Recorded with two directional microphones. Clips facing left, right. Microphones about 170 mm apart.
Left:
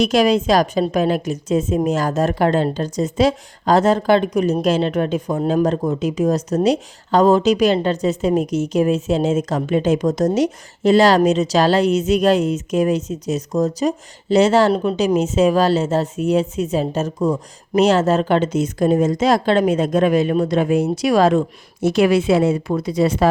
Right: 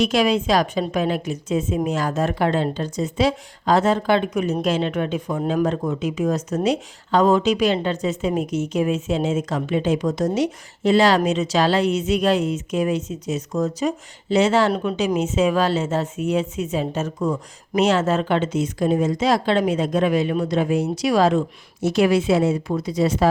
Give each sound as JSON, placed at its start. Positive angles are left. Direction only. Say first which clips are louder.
{"t": 0.0, "sound": "a woman's voice", "louder": "left 3 dB", "side_deg": 40}